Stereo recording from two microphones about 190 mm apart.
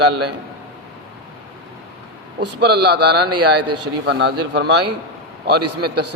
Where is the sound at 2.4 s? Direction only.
60° right (ahead or behind).